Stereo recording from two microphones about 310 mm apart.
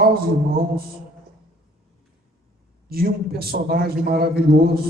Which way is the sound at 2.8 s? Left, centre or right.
Right.